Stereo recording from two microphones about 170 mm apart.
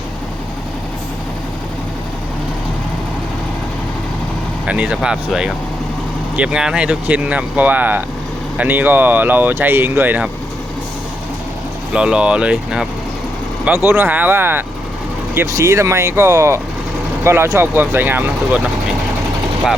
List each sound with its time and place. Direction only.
4.6 s speech: 5° right (ahead or behind)
11.9 s speech: 5° right (ahead or behind)